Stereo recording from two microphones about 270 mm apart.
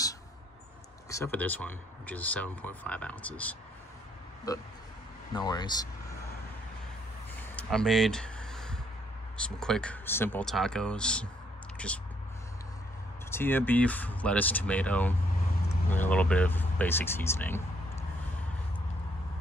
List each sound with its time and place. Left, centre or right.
1.1 s speech: centre
7.5 s a sound: centre
9.6 s speech: centre
13.3 s speech: centre